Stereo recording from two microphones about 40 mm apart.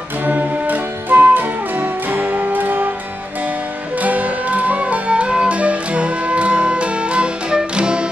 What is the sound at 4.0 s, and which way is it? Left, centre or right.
Music, right.